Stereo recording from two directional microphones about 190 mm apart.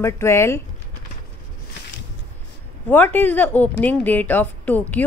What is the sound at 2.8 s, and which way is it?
A woman's voice, 10° left (ahead or behind).